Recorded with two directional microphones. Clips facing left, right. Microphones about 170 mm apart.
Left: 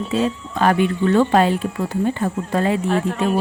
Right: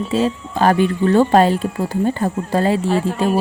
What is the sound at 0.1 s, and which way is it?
Speech, 30° right (ahead or behind).